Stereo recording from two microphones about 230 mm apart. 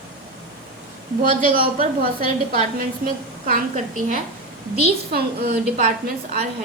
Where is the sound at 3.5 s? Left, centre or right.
Right.